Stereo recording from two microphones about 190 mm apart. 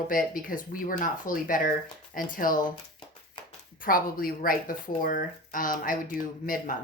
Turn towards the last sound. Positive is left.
turn(degrees=45)  # may be behind; listen again after turning